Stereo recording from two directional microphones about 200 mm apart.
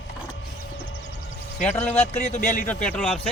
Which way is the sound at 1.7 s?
10° left (ahead or behind).